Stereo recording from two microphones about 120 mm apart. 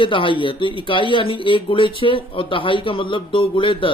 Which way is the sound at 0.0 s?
45° left (ahead or behind).